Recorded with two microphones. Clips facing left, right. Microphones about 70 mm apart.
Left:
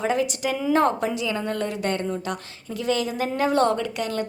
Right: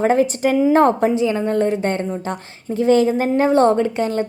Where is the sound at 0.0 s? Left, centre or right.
Right.